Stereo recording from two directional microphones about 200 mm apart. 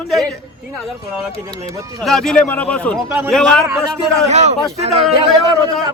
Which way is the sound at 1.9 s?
Centre (ahead or behind).